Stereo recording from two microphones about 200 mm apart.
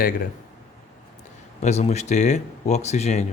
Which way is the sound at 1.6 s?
35° left (ahead or behind).